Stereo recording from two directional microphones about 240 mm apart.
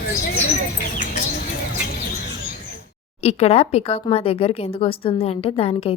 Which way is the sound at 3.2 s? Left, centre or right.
Left.